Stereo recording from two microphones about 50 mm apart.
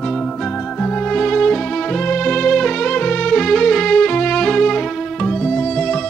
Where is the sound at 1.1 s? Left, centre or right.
Centre.